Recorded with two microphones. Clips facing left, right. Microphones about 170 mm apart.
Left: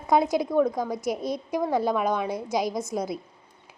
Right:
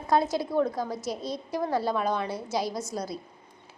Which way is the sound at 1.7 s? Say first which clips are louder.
Left 3 dB; 15° left (ahead or behind).